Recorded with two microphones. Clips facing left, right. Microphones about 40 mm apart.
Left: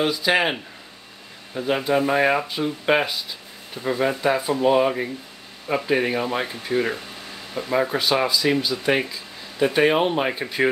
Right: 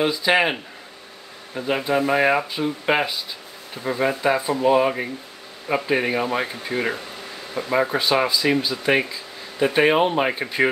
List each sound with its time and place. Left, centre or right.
0.0 s speech: centre